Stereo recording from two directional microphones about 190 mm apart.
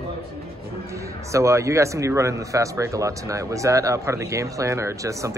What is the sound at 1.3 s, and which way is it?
Speech, 15° right (ahead or behind).